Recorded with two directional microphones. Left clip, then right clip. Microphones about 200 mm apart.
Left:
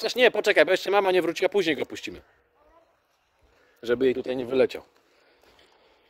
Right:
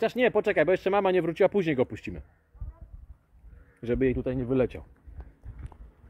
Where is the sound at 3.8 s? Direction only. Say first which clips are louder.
Left 4 dB; 20° left (ahead or behind).